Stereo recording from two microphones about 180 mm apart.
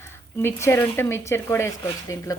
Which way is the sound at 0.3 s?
15° left (ahead or behind).